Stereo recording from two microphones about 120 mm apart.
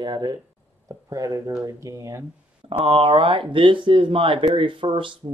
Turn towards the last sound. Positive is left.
turn(degrees=-45)  # may be behind; listen again after turning